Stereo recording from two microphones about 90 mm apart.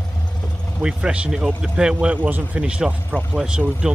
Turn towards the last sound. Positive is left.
turn(degrees=-10)  # may be behind; listen again after turning